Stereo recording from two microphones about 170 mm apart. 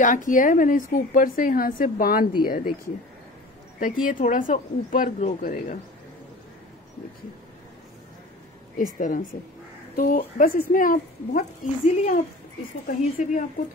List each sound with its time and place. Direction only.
0.0 s a woman's voice: 50° left (ahead or behind)
4.0 s speech: 50° left (ahead or behind)
8.7 s speech: 50° left (ahead or behind)